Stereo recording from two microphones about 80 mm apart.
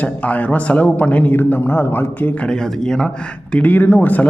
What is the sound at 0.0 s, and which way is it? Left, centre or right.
Speech, centre.